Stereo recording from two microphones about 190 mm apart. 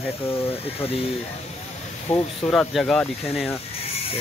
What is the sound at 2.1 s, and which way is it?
Speech, 5° left (ahead or behind).